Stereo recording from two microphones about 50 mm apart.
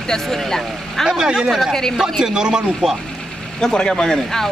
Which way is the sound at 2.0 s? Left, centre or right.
Centre.